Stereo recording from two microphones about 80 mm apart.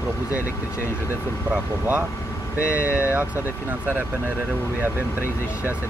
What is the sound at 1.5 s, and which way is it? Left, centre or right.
Speech, right.